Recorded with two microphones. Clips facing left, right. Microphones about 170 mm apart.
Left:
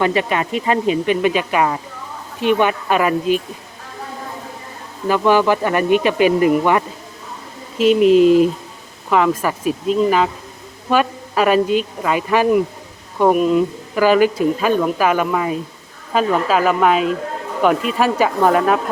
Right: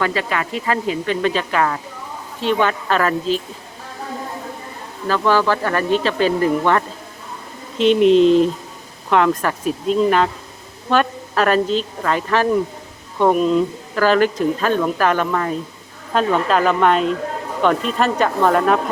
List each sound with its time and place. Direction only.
0.0 s speech: 20° left (ahead or behind)
5.0 s speech: 15° left (ahead or behind)